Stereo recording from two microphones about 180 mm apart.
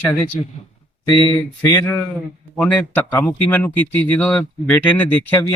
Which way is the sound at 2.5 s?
10° left (ahead or behind).